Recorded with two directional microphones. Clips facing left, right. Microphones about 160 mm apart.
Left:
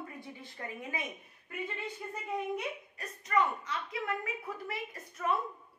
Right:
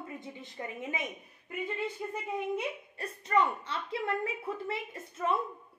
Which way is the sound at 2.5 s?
30° right (ahead or behind).